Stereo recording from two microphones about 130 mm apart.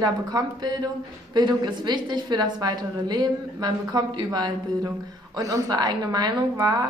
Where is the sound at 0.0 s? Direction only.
30° right (ahead or behind).